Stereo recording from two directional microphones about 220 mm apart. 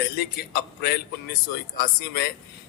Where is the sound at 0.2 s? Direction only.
45° left (ahead or behind).